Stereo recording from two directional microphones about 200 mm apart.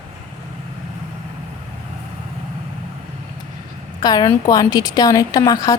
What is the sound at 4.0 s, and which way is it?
A woman's voice, 20° left (ahead or behind).